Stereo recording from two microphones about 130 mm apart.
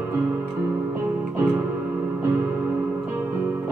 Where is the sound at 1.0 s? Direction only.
15° right (ahead or behind).